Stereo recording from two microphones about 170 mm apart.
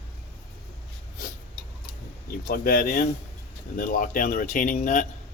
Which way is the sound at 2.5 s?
60° left (ahead or behind).